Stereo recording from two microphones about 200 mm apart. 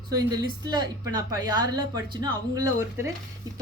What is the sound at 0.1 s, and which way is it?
A woman's voice, 20° right (ahead or behind).